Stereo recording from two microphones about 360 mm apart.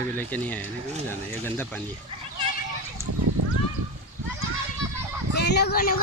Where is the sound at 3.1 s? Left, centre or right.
Right.